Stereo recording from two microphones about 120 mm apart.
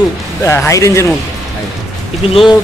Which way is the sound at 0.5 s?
25° left (ahead or behind).